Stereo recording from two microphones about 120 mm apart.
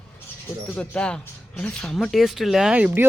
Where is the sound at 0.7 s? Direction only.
10° left (ahead or behind).